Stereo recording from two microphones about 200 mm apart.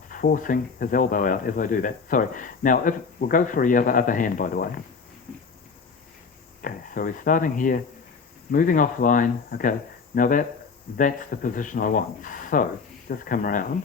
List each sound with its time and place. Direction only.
0.1 s speech: 45° left (ahead or behind)
6.6 s speech: 45° left (ahead or behind)